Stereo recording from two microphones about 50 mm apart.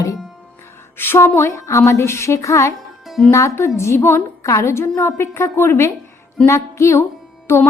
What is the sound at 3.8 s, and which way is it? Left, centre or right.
A woman's voice, left.